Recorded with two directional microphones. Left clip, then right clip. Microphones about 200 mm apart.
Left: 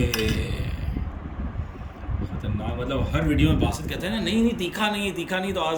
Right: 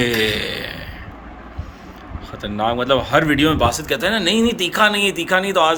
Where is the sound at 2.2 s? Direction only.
5° right (ahead or behind).